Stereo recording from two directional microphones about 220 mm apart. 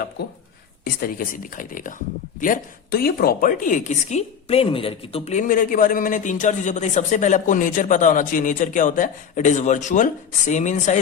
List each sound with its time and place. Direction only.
1.0 s a woman's voice: 40° left (ahead or behind)